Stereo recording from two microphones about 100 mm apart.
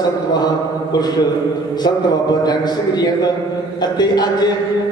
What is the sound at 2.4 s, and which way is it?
A man's voice, 40° left (ahead or behind).